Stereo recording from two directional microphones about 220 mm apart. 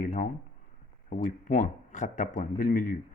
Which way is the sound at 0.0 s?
35° left (ahead or behind).